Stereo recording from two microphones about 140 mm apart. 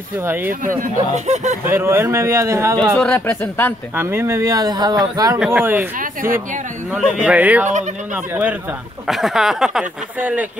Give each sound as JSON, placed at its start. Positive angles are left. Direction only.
{"t": 0.2, "sound": "speech", "side_deg": -15}
{"t": 0.5, "sound": "speech", "side_deg": -75}
{"t": 1.7, "sound": "speech", "side_deg": -20}
{"t": 2.8, "sound": "speech", "side_deg": 5}
{"t": 3.9, "sound": "speech", "side_deg": -15}
{"t": 5.6, "sound": "speech", "side_deg": -15}
{"t": 5.9, "sound": "speech", "side_deg": -80}
{"t": 6.9, "sound": "speech", "side_deg": -10}